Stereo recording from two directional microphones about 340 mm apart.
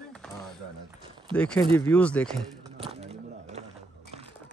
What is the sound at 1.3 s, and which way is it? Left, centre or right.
Speech, centre.